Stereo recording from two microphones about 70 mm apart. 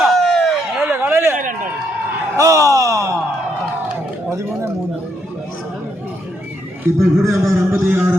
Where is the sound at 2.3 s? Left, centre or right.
Right.